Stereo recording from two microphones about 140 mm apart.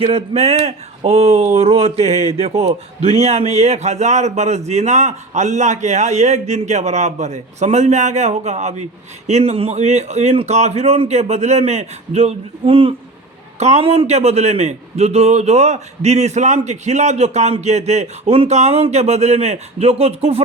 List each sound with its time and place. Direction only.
0.0 s a man's voice: 45° right (ahead or behind)
13.6 s a man's voice: 50° right (ahead or behind)